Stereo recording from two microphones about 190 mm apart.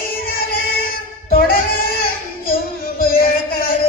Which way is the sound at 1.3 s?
50° left (ahead or behind).